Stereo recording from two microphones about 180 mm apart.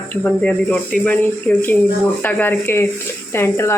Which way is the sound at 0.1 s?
10° left (ahead or behind).